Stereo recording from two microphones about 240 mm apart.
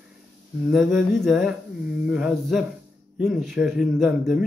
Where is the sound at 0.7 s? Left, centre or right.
Centre.